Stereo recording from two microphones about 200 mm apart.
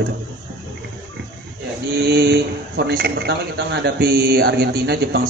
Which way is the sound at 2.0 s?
55° right (ahead or behind).